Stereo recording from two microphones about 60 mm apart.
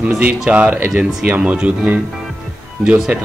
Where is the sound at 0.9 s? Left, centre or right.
Centre.